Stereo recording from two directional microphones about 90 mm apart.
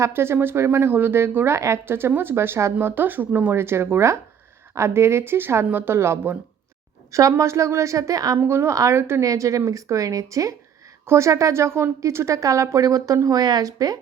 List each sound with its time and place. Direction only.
0.0 s a woman's voice: 30° right (ahead or behind)
8.4 s a woman's voice: 25° right (ahead or behind); by 14.0 s 45° right (ahead or behind)